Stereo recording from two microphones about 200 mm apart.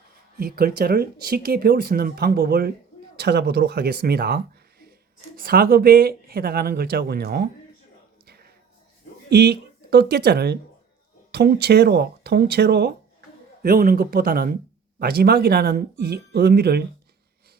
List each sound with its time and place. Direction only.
0.3 s speech: 50° right (ahead or behind)
5.4 s speech: 45° right (ahead or behind)
8.3 s a sound: 50° right (ahead or behind)
9.3 s speech: 55° right (ahead or behind)